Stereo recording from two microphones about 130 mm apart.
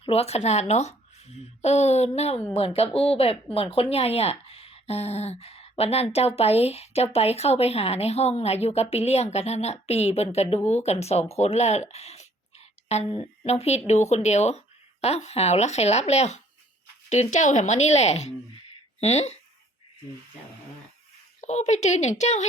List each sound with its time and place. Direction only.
0.0 s speech: 50° left (ahead or behind)
21.4 s speech: 60° left (ahead or behind)